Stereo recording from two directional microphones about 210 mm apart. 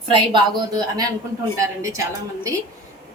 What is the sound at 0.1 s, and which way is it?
A woman's voice, 20° right (ahead or behind).